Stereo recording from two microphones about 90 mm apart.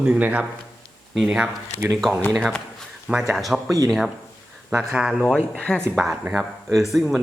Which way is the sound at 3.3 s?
Centre (ahead or behind).